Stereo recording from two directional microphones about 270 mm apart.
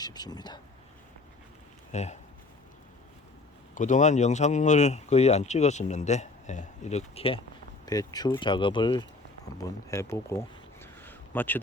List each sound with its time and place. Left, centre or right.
0.0 s speech: centre
1.9 s speech: left
3.8 s speech: left; by 11.6 s centre